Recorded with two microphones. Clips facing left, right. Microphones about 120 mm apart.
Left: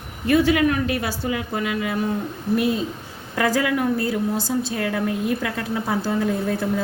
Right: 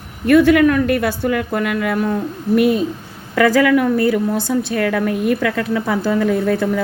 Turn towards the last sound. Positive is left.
turn(degrees=-80)